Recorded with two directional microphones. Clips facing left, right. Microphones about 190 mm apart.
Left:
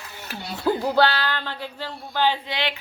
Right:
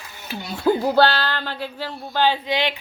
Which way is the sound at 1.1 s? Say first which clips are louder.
Right 2 dB; 65° right (ahead or behind).